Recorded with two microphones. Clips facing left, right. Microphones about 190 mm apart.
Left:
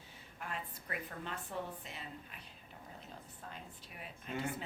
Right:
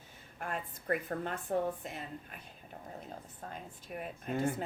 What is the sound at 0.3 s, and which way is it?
Speech, 50° right (ahead or behind).